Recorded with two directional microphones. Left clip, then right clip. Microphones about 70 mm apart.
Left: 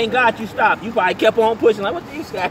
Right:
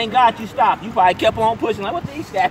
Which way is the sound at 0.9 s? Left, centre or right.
Right.